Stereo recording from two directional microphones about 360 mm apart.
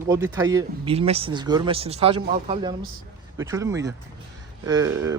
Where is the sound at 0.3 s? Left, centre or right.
Centre.